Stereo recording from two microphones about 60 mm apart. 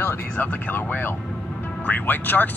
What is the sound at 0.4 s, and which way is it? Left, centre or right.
Speech, left.